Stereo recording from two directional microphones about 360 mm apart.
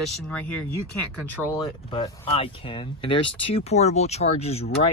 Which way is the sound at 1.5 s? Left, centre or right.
Centre.